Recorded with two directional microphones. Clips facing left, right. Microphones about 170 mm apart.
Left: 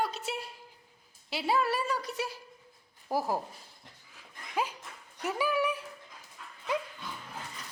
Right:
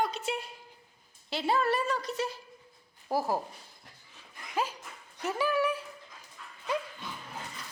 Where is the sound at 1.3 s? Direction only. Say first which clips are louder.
Right 1 dB; 5° left (ahead or behind).